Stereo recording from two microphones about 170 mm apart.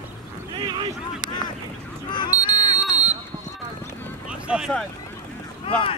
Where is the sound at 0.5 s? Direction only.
25° right (ahead or behind).